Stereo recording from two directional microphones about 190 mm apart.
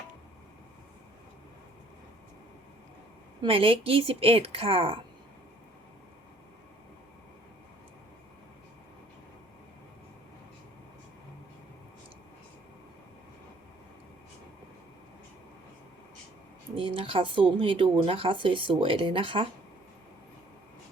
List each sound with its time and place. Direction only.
3.4 s speech: 30° right (ahead or behind)
16.7 s speech: 30° right (ahead or behind)